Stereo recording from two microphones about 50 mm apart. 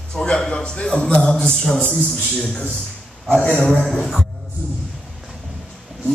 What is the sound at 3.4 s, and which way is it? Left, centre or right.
Speech, left.